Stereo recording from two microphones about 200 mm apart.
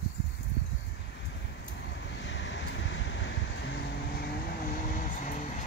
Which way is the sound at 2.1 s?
65° left (ahead or behind).